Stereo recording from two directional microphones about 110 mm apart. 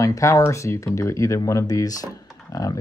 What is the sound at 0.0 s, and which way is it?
Speech, 30° left (ahead or behind).